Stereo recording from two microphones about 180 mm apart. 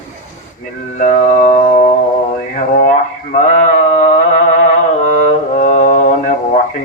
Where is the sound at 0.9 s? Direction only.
45° left (ahead or behind).